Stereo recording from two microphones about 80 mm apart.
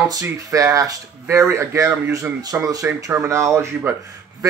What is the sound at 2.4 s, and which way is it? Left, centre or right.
Speech, right.